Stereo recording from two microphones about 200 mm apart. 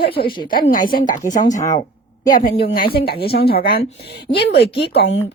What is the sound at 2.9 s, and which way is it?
Speech, 50° left (ahead or behind).